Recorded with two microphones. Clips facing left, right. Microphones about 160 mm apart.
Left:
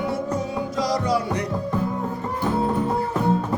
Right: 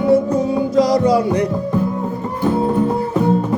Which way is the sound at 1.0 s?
20° right (ahead or behind).